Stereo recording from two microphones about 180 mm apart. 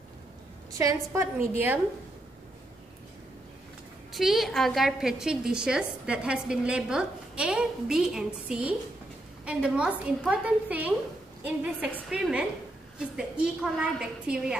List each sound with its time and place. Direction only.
0.7 s a woman's voice: 15° right (ahead or behind)
4.1 s a woman's voice: centre (ahead or behind)